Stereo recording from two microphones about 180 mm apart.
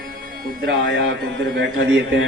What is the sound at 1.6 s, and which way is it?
Speech, 90° right.